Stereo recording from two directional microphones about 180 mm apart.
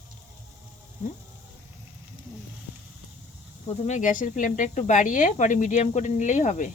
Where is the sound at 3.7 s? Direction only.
40° left (ahead or behind).